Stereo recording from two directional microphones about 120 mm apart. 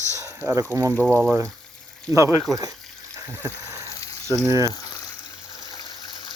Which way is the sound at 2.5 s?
30° right (ahead or behind).